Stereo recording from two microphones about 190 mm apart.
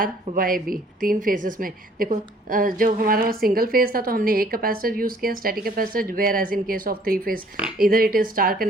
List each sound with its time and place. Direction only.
0.0 s speech: 45° right (ahead or behind)